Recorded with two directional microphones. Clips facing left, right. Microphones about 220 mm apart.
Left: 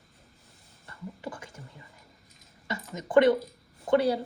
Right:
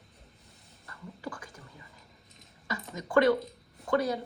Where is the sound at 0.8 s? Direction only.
25° left (ahead or behind).